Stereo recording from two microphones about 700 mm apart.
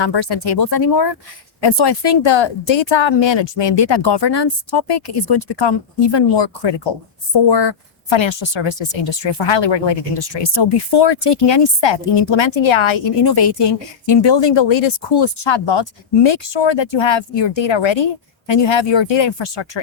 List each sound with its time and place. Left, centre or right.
0.0 s speech: left